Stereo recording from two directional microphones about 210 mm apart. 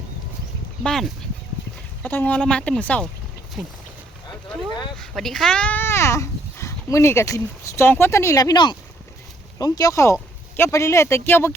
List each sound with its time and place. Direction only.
0.8 s speech: centre (ahead or behind)
4.9 s speech: centre (ahead or behind)